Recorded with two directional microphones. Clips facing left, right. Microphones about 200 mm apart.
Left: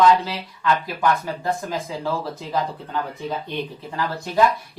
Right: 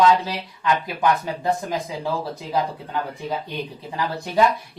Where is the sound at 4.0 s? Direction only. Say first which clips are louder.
Even; 15° right (ahead or behind).